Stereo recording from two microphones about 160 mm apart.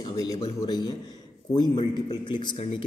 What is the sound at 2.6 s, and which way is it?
Speech, 40° left (ahead or behind).